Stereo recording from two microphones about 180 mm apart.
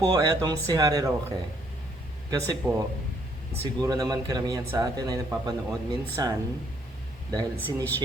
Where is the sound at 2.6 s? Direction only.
10° right (ahead or behind).